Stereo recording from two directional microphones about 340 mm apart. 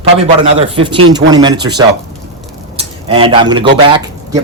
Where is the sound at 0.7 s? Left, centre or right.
Centre.